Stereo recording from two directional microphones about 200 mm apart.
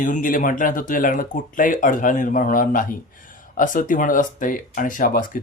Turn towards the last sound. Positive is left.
turn(degrees=45)  # may be behind; listen again after turning